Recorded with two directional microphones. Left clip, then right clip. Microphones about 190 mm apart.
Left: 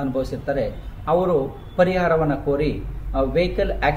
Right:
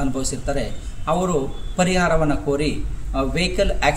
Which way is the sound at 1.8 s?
15° right (ahead or behind).